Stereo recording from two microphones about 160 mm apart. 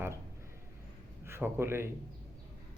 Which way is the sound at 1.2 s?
15° right (ahead or behind).